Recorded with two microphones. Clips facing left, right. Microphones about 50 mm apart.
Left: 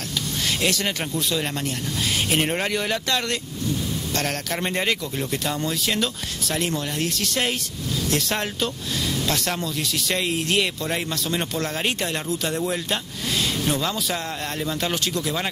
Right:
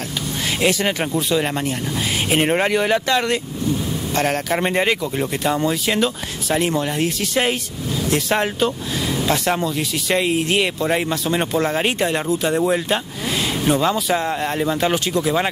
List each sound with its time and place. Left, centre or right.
0.6 s speech: centre